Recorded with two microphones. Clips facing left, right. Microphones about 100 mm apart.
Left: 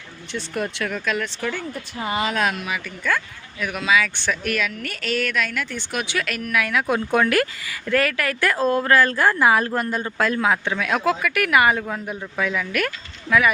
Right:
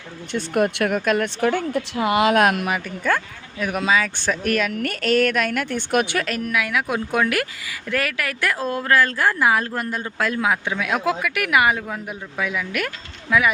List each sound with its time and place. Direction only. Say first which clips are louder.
0.3 s a woman's voice: right 6 dB; 55° right (ahead or behind)
1.7 s a woman's voice: right 6 dB; 75° right (ahead or behind); by 6.2 s 55° right (ahead or behind)
6.2 s speech: right 3 dB; 35° right (ahead or behind)
6.5 s speech: left 3 dB; 15° right (ahead or behind)